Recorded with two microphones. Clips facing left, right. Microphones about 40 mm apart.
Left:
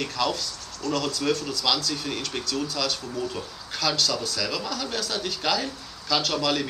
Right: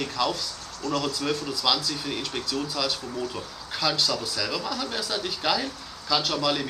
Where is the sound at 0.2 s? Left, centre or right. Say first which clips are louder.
Even; centre.